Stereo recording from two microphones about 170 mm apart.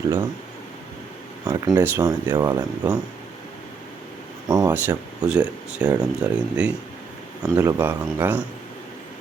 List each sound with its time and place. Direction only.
1.5 s speech: 20° right (ahead or behind)
4.4 s speech: 20° right (ahead or behind)
7.4 s speech: 15° right (ahead or behind)